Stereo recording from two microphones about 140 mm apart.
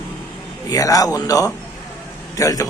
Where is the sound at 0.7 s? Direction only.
25° left (ahead or behind).